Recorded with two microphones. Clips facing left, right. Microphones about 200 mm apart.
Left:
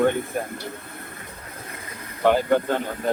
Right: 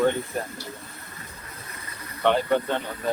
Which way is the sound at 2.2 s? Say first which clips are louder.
Left 3 dB; 5° left (ahead or behind).